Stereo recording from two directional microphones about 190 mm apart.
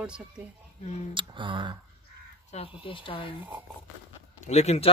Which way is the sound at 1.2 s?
25° right (ahead or behind).